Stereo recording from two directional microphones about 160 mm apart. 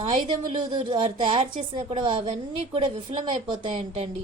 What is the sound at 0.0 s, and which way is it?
A woman's voice, 30° right (ahead or behind).